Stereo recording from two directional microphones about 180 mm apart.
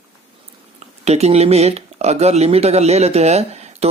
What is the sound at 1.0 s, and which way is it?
Speech, 35° right (ahead or behind).